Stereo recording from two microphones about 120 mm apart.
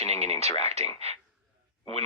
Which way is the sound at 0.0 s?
60° right (ahead or behind).